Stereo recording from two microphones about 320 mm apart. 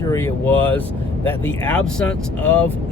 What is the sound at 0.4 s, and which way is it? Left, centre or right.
Speech, centre.